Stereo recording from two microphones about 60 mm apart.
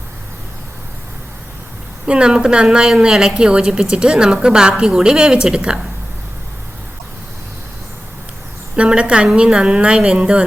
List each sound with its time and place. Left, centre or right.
2.0 s a woman's voice: centre
8.7 s a woman's voice: centre